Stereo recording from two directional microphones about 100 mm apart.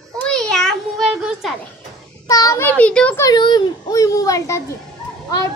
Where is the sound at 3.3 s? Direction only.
50° left (ahead or behind).